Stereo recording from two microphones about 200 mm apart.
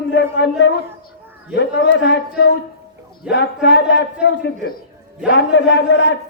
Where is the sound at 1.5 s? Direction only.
60° left (ahead or behind).